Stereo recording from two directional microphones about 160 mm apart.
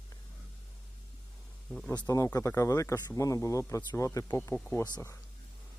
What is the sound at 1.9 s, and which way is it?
Speech, 20° left (ahead or behind).